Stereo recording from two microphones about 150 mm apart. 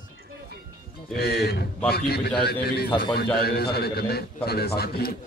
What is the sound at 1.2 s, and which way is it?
Speech, 90° left.